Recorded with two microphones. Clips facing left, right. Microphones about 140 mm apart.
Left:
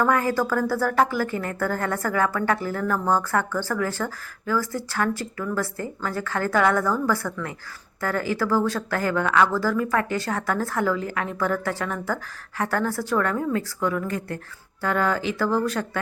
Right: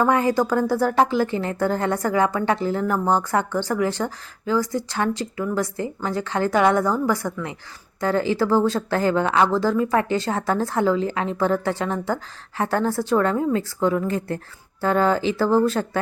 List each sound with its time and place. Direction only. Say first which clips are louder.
0.0 s a woman's voice: right 3 dB; 20° right (ahead or behind)